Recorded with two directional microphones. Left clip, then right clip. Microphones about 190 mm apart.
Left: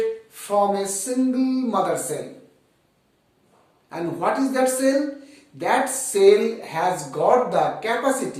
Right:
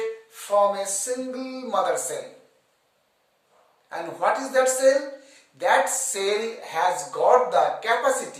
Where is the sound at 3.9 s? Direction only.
20° right (ahead or behind).